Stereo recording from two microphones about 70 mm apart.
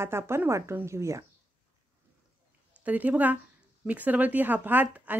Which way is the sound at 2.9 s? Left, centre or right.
Right.